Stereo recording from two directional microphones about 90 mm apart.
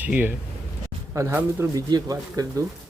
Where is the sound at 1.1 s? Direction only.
35° right (ahead or behind).